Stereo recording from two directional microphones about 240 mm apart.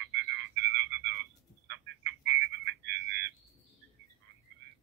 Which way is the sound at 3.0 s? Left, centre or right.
Right.